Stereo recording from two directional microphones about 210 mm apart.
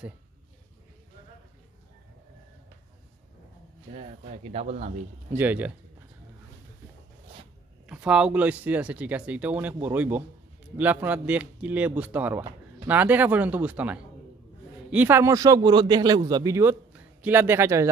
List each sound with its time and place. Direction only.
3.9 s speech: 30° right (ahead or behind)
5.4 s a man's voice: 10° right (ahead or behind)
7.8 s a man's voice: 5° right (ahead or behind)